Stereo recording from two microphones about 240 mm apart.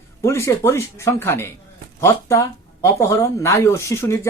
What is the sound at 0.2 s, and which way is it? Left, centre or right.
Speech, centre.